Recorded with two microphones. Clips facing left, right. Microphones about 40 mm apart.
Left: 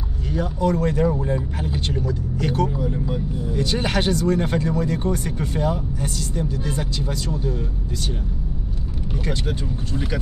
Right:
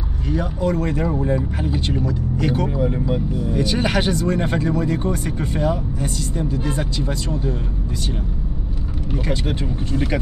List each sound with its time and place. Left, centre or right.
0.3 s speech: centre
2.8 s speech: right
3.5 s speech: centre
9.1 s speech: centre
9.5 s speech: right